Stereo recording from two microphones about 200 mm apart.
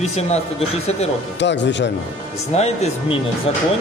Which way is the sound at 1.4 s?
60° left (ahead or behind).